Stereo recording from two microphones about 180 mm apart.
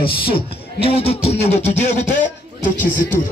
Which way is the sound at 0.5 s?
30° left (ahead or behind).